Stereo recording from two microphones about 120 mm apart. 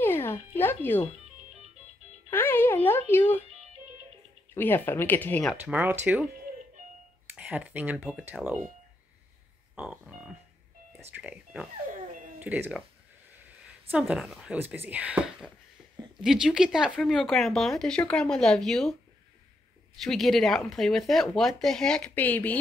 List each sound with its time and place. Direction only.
0.0 s music: 20° left (ahead or behind)
2.3 s speech: 20° left (ahead or behind)
4.6 s speech: 15° left (ahead or behind)
5.6 s speech: 15° right (ahead or behind)
7.3 s speech: 10° right (ahead or behind)
9.8 s speech: 5° right (ahead or behind)
13.8 s speech: 10° right (ahead or behind)
20.0 s speech: centre (ahead or behind)